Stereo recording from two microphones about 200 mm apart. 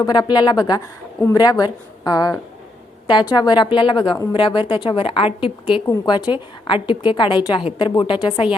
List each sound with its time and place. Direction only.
0.0 s a woman's voice: 20° left (ahead or behind)